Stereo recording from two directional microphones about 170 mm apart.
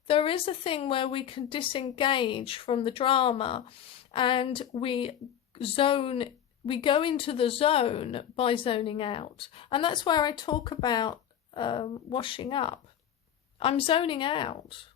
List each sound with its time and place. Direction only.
0.1 s a woman's voice: 35° left (ahead or behind)